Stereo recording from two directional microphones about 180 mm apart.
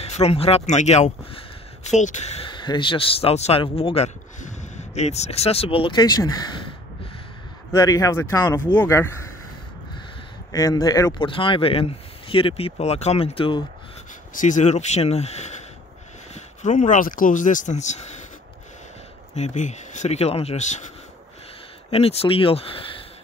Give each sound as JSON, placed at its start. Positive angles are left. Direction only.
{"t": 0.0, "sound": "a man's voice", "side_deg": 35}
{"t": 2.4, "sound": "a man's voice", "side_deg": 25}
{"t": 7.7, "sound": "speech", "side_deg": 15}
{"t": 10.5, "sound": "speech", "side_deg": 20}
{"t": 14.3, "sound": "a man's voice", "side_deg": 45}
{"t": 19.3, "sound": "a man's voice", "side_deg": 40}
{"t": 21.9, "sound": "a man's voice", "side_deg": 35}